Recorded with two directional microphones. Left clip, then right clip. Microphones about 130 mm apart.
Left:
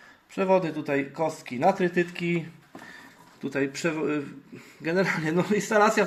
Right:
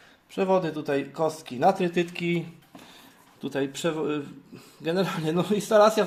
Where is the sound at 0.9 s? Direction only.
40° right (ahead or behind).